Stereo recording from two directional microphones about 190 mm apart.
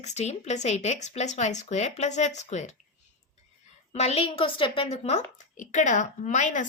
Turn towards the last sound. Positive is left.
turn(degrees=40)  # may be behind; listen again after turning